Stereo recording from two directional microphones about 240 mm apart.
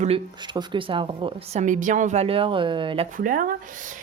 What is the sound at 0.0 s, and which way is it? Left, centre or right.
A woman's voice, right.